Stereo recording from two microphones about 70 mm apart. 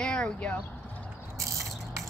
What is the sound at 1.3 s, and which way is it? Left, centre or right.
Mechanisms, right.